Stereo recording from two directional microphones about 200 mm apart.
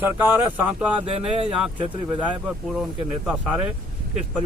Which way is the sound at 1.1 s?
30° right (ahead or behind).